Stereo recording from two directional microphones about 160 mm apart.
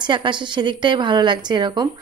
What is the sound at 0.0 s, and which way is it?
A woman's voice, 30° right (ahead or behind).